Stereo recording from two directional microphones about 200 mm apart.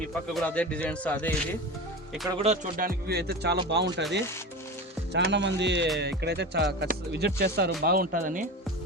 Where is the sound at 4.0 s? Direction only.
60° right (ahead or behind).